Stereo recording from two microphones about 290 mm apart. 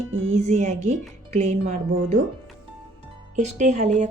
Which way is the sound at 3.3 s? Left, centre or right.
Right.